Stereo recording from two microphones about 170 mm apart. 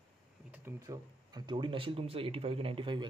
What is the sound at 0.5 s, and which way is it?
Speech, 15° right (ahead or behind).